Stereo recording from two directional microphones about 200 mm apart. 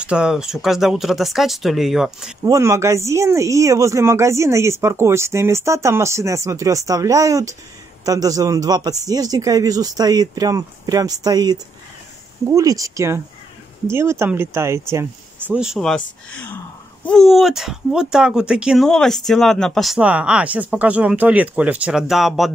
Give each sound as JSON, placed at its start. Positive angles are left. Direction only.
{"t": 0.0, "sound": "speech", "side_deg": -5}
{"t": 2.4, "sound": "speech", "side_deg": -15}
{"t": 17.0, "sound": "speech", "side_deg": 0}